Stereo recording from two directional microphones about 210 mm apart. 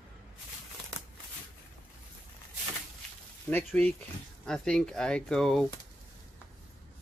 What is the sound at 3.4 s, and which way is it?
Speech, 10° left (ahead or behind).